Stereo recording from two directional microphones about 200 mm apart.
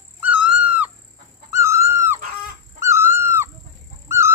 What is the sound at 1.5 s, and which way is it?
Dog, 15° right (ahead or behind).